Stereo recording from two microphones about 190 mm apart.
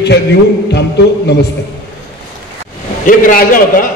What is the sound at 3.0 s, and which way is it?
Speech, 45° left (ahead or behind).